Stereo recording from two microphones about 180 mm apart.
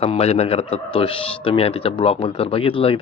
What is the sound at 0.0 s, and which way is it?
A man's voice, 35° left (ahead or behind).